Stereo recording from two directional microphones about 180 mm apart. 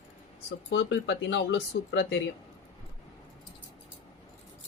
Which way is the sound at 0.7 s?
85° left.